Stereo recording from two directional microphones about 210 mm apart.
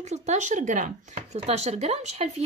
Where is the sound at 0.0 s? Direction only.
35° right (ahead or behind).